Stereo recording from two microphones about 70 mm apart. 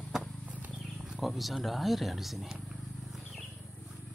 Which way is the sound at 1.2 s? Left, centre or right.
Centre.